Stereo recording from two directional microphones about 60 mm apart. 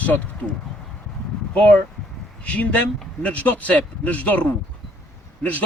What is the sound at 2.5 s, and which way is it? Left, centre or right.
Speech, left.